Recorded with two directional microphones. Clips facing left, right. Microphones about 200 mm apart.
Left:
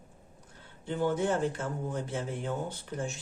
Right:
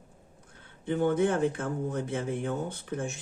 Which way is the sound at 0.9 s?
55° right (ahead or behind).